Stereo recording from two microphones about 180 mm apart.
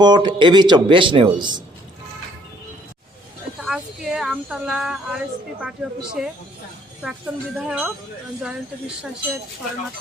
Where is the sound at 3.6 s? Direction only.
Centre (ahead or behind).